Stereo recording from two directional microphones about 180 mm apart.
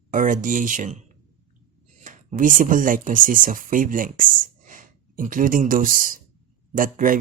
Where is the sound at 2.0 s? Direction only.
45° right (ahead or behind).